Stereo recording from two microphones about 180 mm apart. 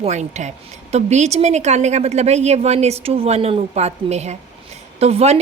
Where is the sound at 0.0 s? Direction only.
40° right (ahead or behind).